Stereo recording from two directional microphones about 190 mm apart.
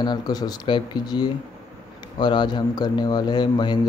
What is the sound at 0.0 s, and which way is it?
Speech, 20° left (ahead or behind).